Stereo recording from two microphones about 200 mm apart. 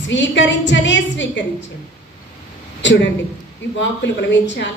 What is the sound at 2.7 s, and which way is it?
A woman's voice, 60° left (ahead or behind).